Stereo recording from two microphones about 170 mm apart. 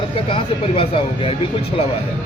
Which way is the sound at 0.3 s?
30° left (ahead or behind).